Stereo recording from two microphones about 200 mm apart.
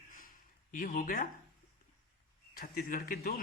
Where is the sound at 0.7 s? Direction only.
40° left (ahead or behind).